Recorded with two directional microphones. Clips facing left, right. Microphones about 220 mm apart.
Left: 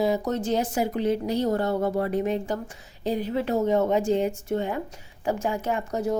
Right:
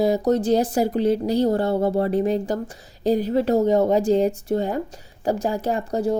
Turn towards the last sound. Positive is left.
turn(degrees=-35)  # may be behind; listen again after turning